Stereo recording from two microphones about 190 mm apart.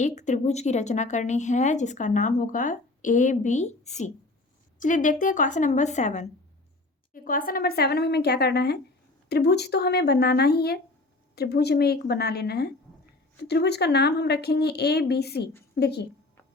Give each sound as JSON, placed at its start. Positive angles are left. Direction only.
{"t": 0.0, "sound": "a woman's voice", "side_deg": 40}